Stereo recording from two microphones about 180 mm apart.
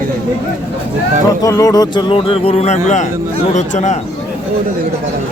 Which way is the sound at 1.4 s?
20° left (ahead or behind).